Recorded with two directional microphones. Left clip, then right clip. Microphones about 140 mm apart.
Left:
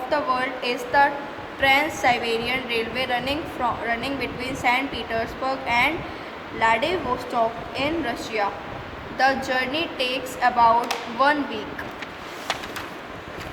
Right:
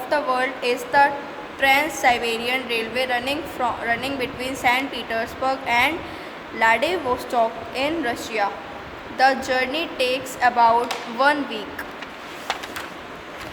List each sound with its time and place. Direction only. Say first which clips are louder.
0.1 s a woman's voice: right 2 dB; 30° right (ahead or behind)